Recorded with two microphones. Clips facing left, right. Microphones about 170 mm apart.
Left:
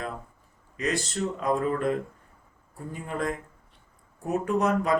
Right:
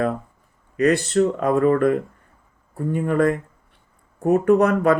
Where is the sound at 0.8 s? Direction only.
60° right (ahead or behind).